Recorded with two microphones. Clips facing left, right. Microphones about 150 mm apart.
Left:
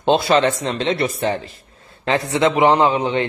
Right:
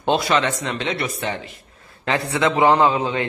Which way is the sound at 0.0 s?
30° left (ahead or behind).